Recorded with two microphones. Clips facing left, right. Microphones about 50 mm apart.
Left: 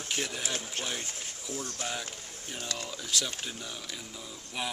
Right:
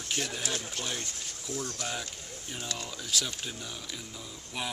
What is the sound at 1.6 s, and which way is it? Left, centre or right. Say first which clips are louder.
Speech: right 2 dB; left.